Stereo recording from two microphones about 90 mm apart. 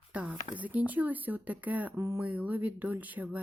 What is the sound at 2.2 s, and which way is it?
Speech, 20° right (ahead or behind).